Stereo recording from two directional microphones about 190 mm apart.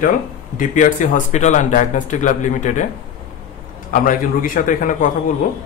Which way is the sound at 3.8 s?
45° left (ahead or behind).